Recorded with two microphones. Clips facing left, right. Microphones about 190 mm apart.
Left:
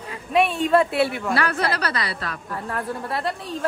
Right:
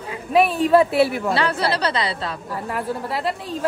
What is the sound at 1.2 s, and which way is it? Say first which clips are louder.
A woman's voice: right 2 dB; 30° right (ahead or behind).